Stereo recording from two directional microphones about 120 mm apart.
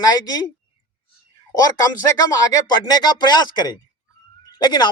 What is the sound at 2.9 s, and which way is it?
Speech, 35° left (ahead or behind).